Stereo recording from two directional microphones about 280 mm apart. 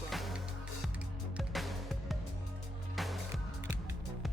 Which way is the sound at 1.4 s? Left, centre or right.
Centre.